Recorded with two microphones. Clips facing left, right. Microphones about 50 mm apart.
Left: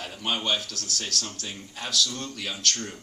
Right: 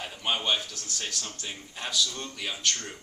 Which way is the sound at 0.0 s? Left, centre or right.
Centre.